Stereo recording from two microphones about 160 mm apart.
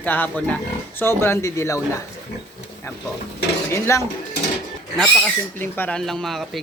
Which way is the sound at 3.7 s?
15° left (ahead or behind).